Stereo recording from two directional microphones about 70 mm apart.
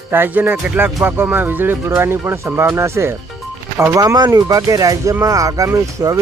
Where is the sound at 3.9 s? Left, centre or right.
Right.